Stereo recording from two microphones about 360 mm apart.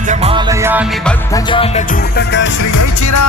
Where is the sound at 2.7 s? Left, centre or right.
Left.